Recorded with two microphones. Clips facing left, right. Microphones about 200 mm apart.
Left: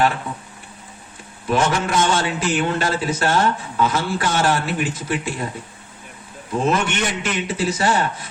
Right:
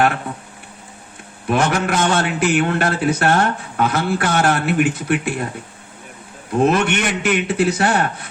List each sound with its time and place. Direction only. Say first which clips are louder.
1.5 s speech: right 2 dB; 60° right (ahead or behind)
6.6 s speech: right 4 dB; 60° right (ahead or behind)